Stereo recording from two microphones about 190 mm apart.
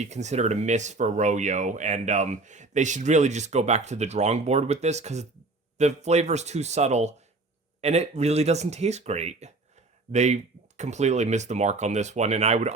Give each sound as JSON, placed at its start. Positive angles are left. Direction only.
{"t": 0.0, "sound": "speech", "side_deg": -35}